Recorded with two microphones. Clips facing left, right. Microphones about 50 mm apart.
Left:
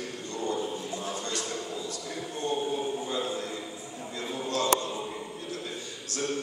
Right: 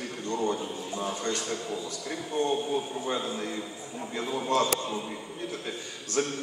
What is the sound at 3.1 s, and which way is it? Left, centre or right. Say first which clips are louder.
A man's voice: right 1 dB; right.